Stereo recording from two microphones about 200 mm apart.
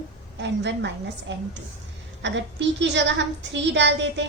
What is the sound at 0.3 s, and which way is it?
A woman's voice, 60° right (ahead or behind).